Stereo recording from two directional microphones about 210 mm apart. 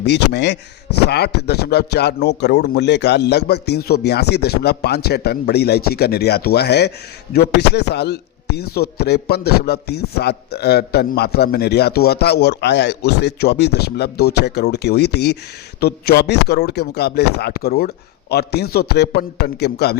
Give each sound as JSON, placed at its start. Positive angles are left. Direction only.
{"t": 0.0, "sound": "speech", "side_deg": 55}